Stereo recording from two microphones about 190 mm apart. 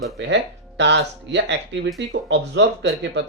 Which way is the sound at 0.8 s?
70° right (ahead or behind).